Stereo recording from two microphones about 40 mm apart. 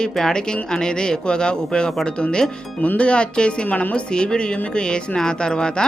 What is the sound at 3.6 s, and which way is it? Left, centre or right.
Speech, left.